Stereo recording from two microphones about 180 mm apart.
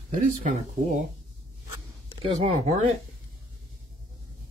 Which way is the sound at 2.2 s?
30° right (ahead or behind).